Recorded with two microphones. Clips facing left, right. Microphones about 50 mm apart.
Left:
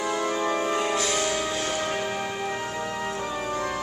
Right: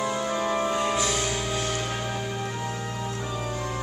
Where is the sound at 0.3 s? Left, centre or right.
Left.